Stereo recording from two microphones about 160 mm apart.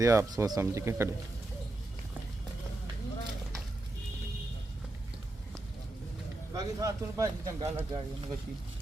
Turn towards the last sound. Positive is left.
turn(degrees=-25)  # may be behind; listen again after turning